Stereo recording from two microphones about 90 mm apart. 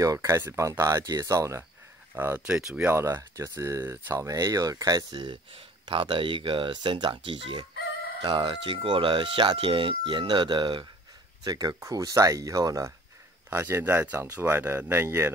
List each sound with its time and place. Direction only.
0.0 s speech: 35° right (ahead or behind)
2.1 s speech: 20° right (ahead or behind)
3.0 s speech: 35° right (ahead or behind); by 10.9 s 60° right (ahead or behind)
11.4 s speech: 45° right (ahead or behind)
13.5 s speech: 25° right (ahead or behind)